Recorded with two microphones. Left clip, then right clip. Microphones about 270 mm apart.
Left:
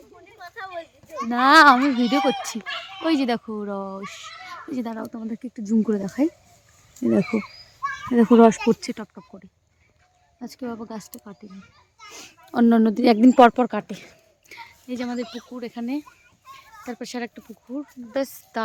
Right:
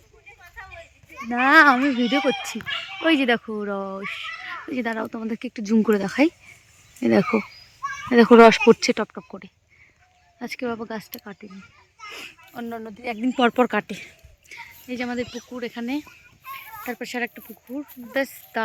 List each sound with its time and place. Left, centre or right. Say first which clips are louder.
0.6 s children playing: left 8 dB; left
1.3 s a child's voice: left 2 dB; centre
5.1 s speech: right 3 dB; centre
10.8 s a child's voice: right 4 dB; centre
11.9 s children playing: right 5 dB; centre
12.6 s speech: left 13 dB; left
13.5 s a child's voice: right 3 dB; centre
14.5 s a sound: right 1 dB; centre
15.5 s a child's voice: right 1 dB; centre